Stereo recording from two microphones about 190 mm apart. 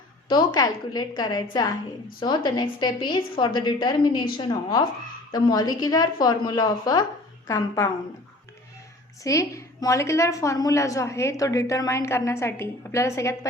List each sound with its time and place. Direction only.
0.3 s a woman's voice: 20° left (ahead or behind)
9.2 s a woman's voice: 15° left (ahead or behind)